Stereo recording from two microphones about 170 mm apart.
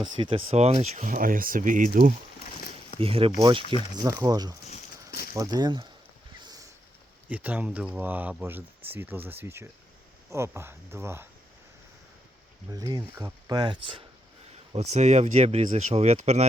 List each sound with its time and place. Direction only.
0.0 s speech: 30° right (ahead or behind); by 2.1 s 50° right (ahead or behind)
3.0 s speech: 35° right (ahead or behind)
6.4 s a sound: 20° right (ahead or behind)
7.3 s speech: 10° right (ahead or behind)
12.7 s speech: 25° right (ahead or behind)
14.5 s speech: 40° right (ahead or behind)